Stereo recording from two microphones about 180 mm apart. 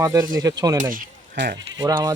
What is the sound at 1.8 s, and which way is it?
Speech, 20° right (ahead or behind).